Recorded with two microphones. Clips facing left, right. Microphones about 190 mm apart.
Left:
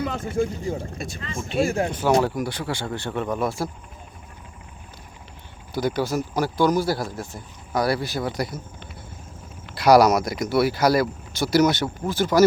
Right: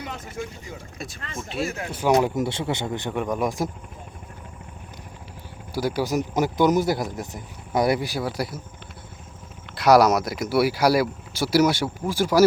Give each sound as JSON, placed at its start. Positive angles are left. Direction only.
{"t": 0.3, "sound": "speech", "side_deg": 30}
{"t": 0.9, "sound": "speech", "side_deg": 0}
{"t": 1.6, "sound": "speech", "side_deg": 30}
{"t": 1.9, "sound": "speech", "side_deg": -10}
{"t": 2.2, "sound": "speech", "side_deg": -25}
{"t": 5.7, "sound": "speech", "side_deg": -10}
{"t": 9.7, "sound": "speech", "side_deg": 0}